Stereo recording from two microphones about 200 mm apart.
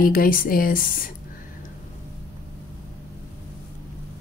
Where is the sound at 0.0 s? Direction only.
45° left (ahead or behind).